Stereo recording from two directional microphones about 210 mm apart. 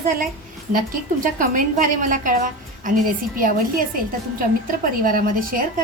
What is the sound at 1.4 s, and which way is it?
A woman's voice, 40° right (ahead or behind).